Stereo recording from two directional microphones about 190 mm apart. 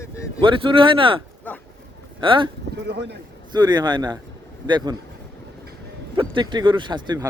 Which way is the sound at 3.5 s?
20° right (ahead or behind).